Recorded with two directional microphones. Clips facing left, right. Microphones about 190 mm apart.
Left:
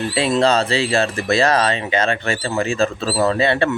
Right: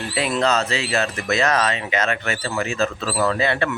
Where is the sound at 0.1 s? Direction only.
30° left (ahead or behind).